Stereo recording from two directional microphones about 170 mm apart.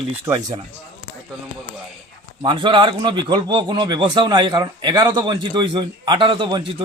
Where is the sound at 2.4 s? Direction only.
30° right (ahead or behind).